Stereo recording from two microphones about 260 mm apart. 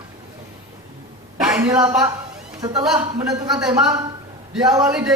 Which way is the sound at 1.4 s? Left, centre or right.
Centre.